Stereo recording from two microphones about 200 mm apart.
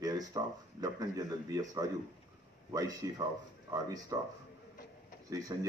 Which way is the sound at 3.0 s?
20° right (ahead or behind).